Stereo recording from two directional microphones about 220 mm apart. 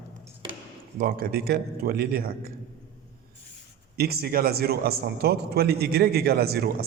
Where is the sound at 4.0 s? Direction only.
45° right (ahead or behind).